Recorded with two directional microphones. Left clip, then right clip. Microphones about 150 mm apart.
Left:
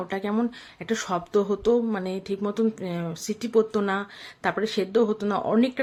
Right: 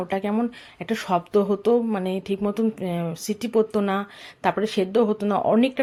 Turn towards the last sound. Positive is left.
turn(degrees=-15)  # may be behind; listen again after turning